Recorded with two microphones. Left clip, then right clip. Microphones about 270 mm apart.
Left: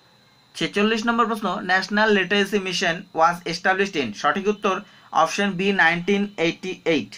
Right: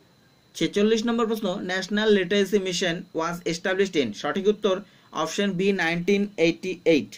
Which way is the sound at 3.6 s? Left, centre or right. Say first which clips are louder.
Left 4 dB; left.